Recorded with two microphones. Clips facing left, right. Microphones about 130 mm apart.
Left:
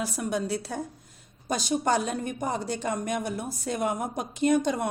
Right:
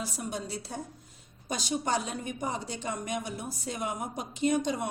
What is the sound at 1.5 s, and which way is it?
A woman's voice, 45° left (ahead or behind).